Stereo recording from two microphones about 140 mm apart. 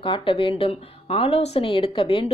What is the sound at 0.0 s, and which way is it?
A woman's voice, 35° left (ahead or behind).